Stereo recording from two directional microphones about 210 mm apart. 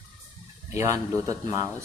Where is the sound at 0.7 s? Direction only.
15° right (ahead or behind).